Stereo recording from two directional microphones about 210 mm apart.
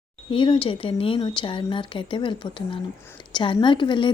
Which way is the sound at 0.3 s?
25° left (ahead or behind).